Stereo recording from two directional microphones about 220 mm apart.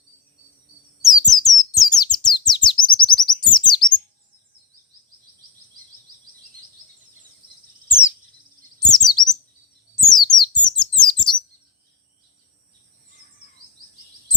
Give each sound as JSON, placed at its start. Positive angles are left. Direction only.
{"t": 1.1, "sound": "bird", "side_deg": 15}
{"t": 7.9, "sound": "bird", "side_deg": 10}
{"t": 8.9, "sound": "chirp", "side_deg": 20}
{"t": 10.0, "sound": "a sound", "side_deg": 20}